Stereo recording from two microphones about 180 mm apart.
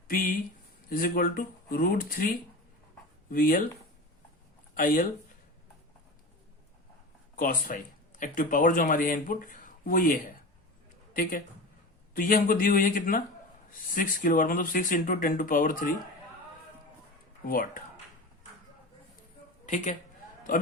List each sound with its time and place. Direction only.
0.1 s speech: 50° left (ahead or behind)
3.3 s speech: 50° left (ahead or behind)
4.7 s speech: 50° left (ahead or behind)
7.3 s a man's voice: 50° left (ahead or behind)
17.4 s speech: 50° left (ahead or behind)
19.6 s a woman's voice: 40° left (ahead or behind)